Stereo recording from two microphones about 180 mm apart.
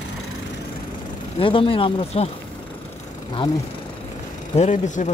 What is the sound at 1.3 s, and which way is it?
Speech, 30° left (ahead or behind).